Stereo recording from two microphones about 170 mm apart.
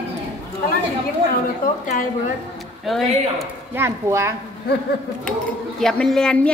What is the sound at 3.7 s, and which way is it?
Speech, 15° right (ahead or behind).